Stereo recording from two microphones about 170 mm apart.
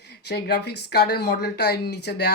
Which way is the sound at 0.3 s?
70° left (ahead or behind).